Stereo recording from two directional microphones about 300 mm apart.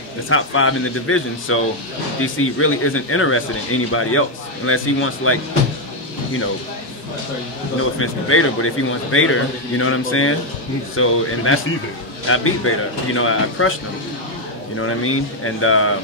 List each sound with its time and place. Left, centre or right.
0.3 s speech: left
8.0 s speech: left
14.8 s speech: left